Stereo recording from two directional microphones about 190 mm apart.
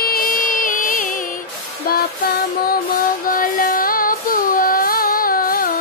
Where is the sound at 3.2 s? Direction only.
45° left (ahead or behind).